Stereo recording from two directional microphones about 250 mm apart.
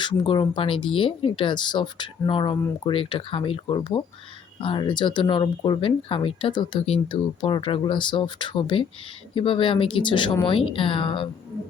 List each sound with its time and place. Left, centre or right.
0.0 s speech: centre